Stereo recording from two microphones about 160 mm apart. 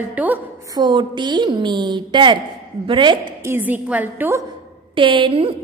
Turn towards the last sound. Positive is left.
turn(degrees=-30)  # may be behind; listen again after turning